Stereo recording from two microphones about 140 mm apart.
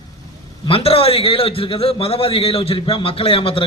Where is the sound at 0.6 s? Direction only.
40° left (ahead or behind).